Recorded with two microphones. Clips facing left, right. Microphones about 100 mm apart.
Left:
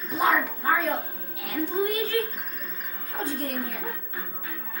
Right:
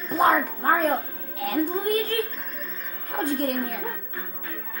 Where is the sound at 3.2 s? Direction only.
55° right (ahead or behind).